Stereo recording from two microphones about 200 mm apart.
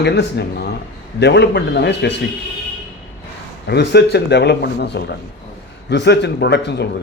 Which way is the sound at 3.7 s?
55° left (ahead or behind).